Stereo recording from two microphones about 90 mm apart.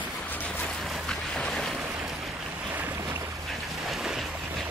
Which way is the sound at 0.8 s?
Centre (ahead or behind).